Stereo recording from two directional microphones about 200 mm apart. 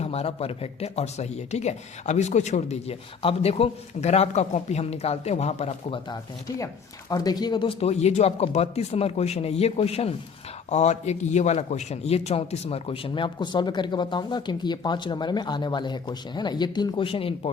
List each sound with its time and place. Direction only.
0.0 s speech: 30° left (ahead or behind)
7.1 s a man's voice: 20° left (ahead or behind)